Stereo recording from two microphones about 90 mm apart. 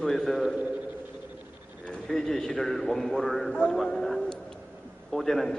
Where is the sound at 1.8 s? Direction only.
10° left (ahead or behind).